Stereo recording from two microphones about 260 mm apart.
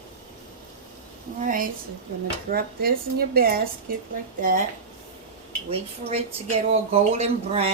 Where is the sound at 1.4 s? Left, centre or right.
Right.